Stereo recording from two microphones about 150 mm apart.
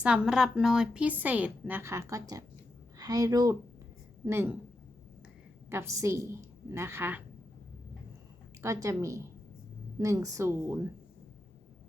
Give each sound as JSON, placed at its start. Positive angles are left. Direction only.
{"t": 0.0, "sound": "a woman's voice", "side_deg": -5}
{"t": 5.7, "sound": "a woman's voice", "side_deg": -20}
{"t": 8.6, "sound": "a woman's voice", "side_deg": -20}